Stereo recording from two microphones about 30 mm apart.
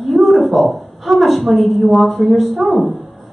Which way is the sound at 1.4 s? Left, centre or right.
Centre.